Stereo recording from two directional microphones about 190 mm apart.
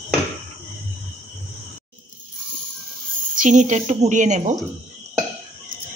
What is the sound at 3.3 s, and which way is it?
A woman's voice, 40° right (ahead or behind).